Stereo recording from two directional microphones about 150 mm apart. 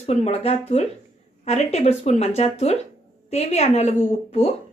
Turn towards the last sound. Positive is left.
turn(degrees=40)  # may be behind; listen again after turning